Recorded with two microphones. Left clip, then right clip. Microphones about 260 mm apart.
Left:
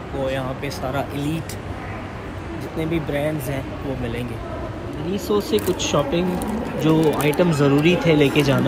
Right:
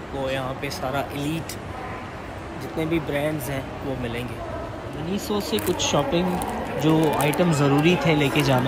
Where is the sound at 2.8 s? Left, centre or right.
Centre.